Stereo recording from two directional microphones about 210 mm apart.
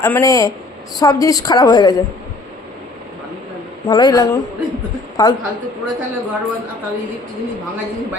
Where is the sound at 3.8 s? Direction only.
20° left (ahead or behind).